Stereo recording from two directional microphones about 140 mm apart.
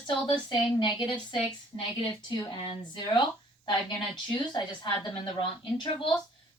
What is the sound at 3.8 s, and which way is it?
A woman's voice, 35° left (ahead or behind).